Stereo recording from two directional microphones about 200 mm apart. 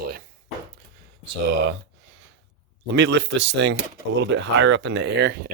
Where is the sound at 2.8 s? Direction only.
60° right (ahead or behind).